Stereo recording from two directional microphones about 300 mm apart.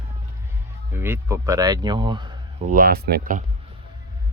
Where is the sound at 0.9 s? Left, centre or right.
Centre.